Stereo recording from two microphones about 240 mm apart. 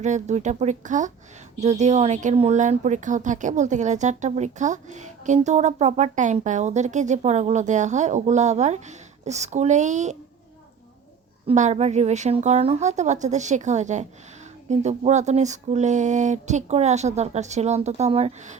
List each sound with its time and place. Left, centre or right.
0.0 s speech: right
11.4 s speech: right